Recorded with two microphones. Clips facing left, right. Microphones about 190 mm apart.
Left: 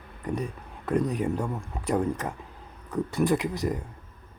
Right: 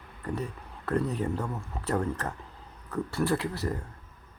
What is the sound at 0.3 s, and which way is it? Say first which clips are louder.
Speech: left 2 dB; 15° left (ahead or behind).